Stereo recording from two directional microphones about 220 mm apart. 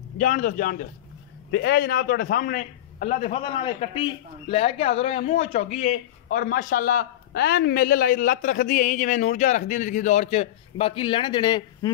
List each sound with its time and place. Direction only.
0.2 s a man's voice: 35° left (ahead or behind); by 11.9 s 20° left (ahead or behind)